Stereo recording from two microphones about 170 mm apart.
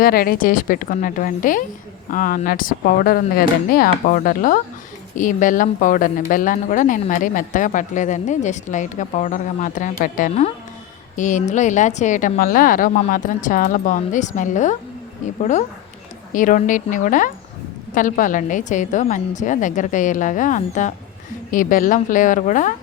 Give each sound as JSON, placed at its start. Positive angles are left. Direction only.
{"t": 0.0, "sound": "a woman's voice", "side_deg": 60}